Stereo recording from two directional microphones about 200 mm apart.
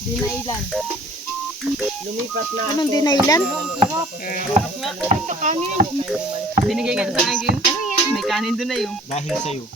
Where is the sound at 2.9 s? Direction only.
20° left (ahead or behind).